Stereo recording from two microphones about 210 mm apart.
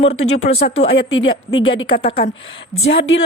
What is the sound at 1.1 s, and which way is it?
Speech, 70° left (ahead or behind).